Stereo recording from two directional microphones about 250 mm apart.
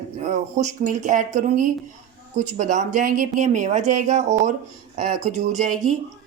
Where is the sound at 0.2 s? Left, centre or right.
Right.